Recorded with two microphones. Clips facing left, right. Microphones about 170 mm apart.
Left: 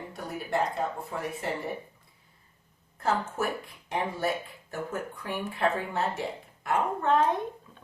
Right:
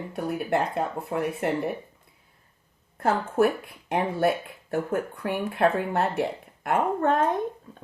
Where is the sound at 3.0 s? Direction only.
60° right (ahead or behind).